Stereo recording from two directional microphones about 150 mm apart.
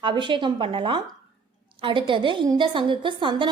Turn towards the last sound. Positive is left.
turn(degrees=-30)  # may be behind; listen again after turning